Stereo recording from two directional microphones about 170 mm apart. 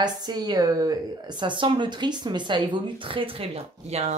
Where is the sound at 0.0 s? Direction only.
25° right (ahead or behind).